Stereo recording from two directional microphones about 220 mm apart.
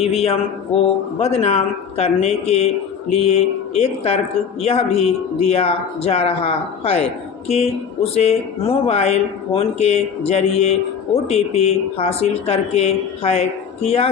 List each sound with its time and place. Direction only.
0.0 s speech: 25° left (ahead or behind)